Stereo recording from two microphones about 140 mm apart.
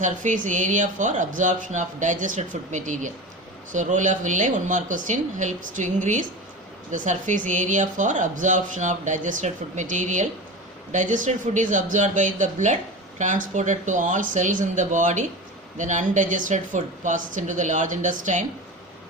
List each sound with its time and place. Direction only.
0.0 s speech: 65° right (ahead or behind)